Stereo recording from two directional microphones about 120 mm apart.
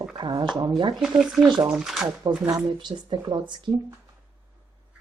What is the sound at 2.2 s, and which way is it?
Speech, 40° right (ahead or behind).